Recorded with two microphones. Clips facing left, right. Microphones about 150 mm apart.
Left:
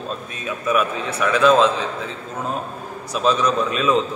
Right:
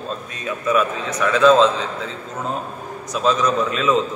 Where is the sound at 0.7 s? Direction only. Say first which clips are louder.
Right 1 dB; 15° left (ahead or behind).